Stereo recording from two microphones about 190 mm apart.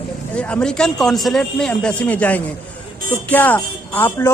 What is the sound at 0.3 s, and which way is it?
A man's voice, 5° left (ahead or behind).